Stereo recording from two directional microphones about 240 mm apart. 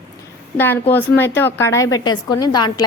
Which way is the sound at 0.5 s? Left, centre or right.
Centre.